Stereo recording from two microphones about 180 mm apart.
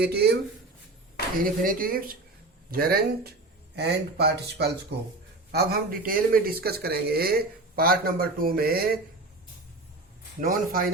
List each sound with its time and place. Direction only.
0.0 s speech: 65° right (ahead or behind)
1.4 s speech: 50° right (ahead or behind)
10.4 s speech: 50° right (ahead or behind)